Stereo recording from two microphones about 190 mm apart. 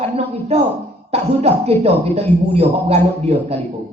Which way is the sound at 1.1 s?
35° right (ahead or behind).